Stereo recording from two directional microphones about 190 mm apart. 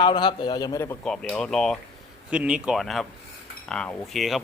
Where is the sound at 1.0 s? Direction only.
5° left (ahead or behind).